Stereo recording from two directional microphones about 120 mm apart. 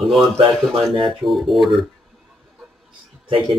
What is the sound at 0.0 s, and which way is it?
Speech, centre (ahead or behind).